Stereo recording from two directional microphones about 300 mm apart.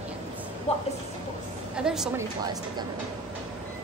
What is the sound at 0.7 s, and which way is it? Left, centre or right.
Speech, centre.